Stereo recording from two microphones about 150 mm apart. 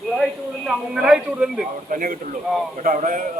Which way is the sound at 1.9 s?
70° right (ahead or behind).